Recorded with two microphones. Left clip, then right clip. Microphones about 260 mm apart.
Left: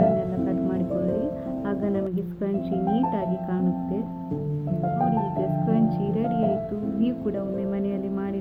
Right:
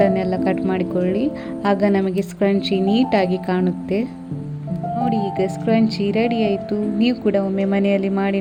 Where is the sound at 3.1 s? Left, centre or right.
Right.